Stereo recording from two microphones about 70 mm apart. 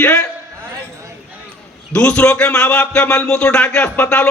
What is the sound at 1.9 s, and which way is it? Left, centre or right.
Speech, left.